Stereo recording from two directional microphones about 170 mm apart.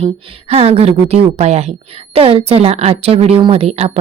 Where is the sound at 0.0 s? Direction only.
35° right (ahead or behind).